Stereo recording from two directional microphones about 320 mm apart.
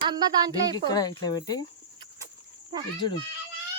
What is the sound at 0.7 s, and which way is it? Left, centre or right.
Speech, centre.